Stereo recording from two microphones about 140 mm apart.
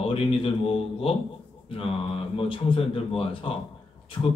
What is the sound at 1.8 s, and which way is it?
Speech, 40° left (ahead or behind).